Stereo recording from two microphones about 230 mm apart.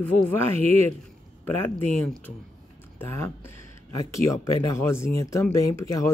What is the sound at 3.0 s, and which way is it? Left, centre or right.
Speech, centre.